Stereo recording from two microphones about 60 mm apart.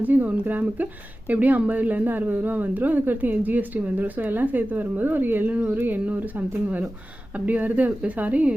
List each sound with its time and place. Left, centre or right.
0.0 s speech: right